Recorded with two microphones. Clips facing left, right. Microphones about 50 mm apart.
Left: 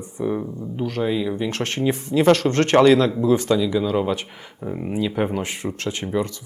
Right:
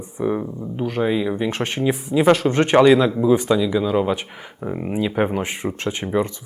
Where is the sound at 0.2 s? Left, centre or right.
Centre.